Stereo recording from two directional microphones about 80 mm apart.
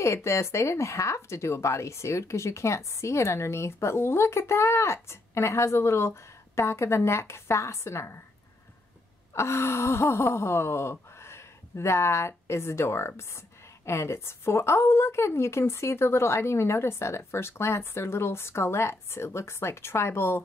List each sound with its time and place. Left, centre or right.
0.0 s speech: left
9.3 s gasp: left
13.8 s speech: left